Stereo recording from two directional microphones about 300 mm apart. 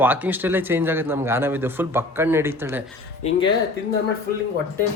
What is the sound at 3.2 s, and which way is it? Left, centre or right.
Speech, left.